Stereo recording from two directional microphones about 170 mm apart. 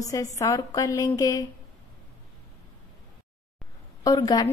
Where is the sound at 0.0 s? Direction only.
20° left (ahead or behind).